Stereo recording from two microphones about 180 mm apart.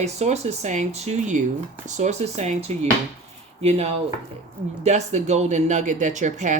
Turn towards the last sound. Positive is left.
turn(degrees=-40)  # may be behind; listen again after turning